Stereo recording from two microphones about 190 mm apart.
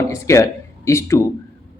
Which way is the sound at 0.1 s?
15° left (ahead or behind).